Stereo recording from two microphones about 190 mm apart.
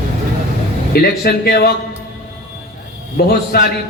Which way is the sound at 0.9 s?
55° left (ahead or behind).